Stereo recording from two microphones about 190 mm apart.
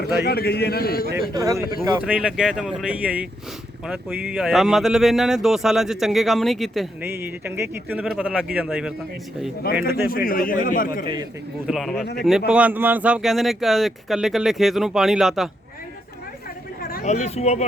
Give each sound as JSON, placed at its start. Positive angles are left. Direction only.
{"t": 0.0, "sound": "a man's voice", "side_deg": 55}
{"t": 1.2, "sound": "speech", "side_deg": -20}
{"t": 2.0, "sound": "a man's voice", "side_deg": -5}
{"t": 7.0, "sound": "a man's voice", "side_deg": -10}
{"t": 9.9, "sound": "speech", "side_deg": 50}
{"t": 11.0, "sound": "speech", "side_deg": -25}
{"t": 11.6, "sound": "speech", "side_deg": 0}
{"t": 16.9, "sound": "speech", "side_deg": 40}